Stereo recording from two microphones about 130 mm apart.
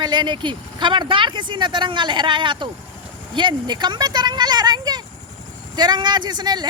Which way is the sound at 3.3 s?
35° right (ahead or behind).